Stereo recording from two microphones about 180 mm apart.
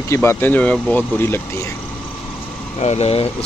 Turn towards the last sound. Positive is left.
turn(degrees=35)  # may be behind; listen again after turning